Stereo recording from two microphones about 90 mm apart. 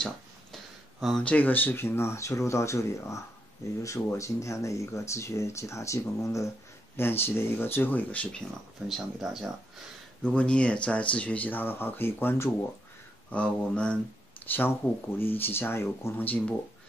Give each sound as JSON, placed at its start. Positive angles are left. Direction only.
{"t": 1.2, "sound": "speech", "side_deg": 15}
{"t": 7.0, "sound": "speech", "side_deg": 25}
{"t": 8.8, "sound": "speech", "side_deg": -5}
{"t": 10.2, "sound": "speech", "side_deg": 10}